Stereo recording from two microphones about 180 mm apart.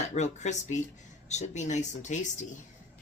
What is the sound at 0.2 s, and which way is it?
A woman's voice, 40° left (ahead or behind).